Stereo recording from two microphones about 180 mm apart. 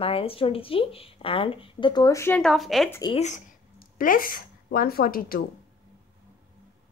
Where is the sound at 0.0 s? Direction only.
30° left (ahead or behind); by 2.9 s centre (ahead or behind).